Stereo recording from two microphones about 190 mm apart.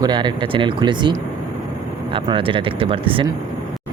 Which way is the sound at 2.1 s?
25° right (ahead or behind).